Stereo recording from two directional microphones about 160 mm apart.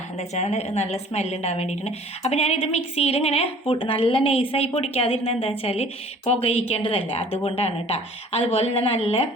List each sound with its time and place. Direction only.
0.2 s a woman's voice: 40° left (ahead or behind)